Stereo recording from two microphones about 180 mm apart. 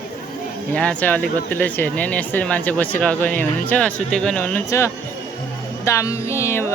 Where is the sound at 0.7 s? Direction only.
10° left (ahead or behind).